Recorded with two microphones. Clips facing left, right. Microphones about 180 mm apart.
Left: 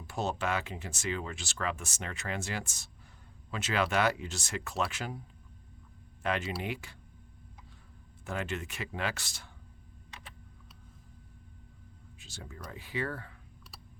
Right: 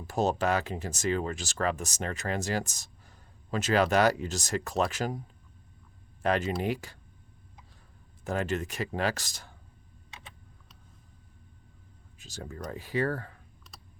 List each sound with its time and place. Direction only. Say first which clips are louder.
0.1 s speech: right 6 dB; 40° right (ahead or behind)
6.2 s speech: right 6 dB; 40° right (ahead or behind)
8.2 s speech: right 6 dB; 40° right (ahead or behind)
12.2 s speech: right 7 dB; 40° right (ahead or behind)